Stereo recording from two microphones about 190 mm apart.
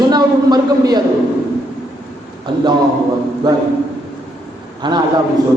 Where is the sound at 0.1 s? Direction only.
20° right (ahead or behind).